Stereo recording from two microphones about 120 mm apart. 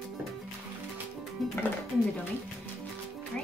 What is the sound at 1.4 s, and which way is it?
Speech, centre (ahead or behind).